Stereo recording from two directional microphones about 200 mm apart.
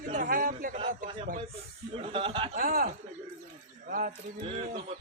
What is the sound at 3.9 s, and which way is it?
Speech, 40° right (ahead or behind).